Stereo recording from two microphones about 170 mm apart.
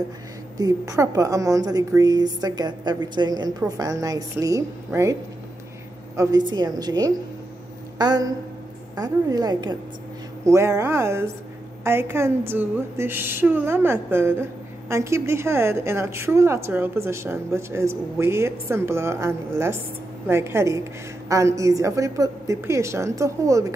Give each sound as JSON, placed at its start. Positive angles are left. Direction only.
{"t": 0.6, "sound": "a woman's voice", "side_deg": -20}
{"t": 6.1, "sound": "a woman's voice", "side_deg": -25}